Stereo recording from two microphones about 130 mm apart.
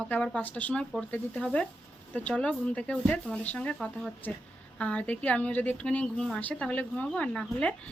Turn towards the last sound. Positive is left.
turn(degrees=10)  # may be behind; listen again after turning